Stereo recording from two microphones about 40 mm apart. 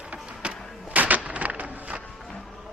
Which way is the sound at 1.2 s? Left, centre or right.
Right.